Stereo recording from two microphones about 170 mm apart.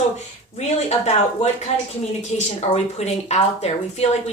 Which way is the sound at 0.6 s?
40° left (ahead or behind).